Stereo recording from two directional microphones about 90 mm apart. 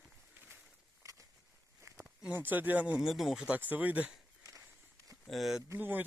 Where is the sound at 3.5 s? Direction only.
20° right (ahead or behind).